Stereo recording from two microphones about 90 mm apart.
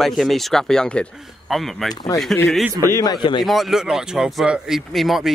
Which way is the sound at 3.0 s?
45° left (ahead or behind).